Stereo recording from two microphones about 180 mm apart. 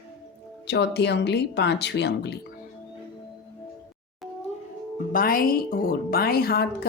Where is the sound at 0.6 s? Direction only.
70° left (ahead or behind).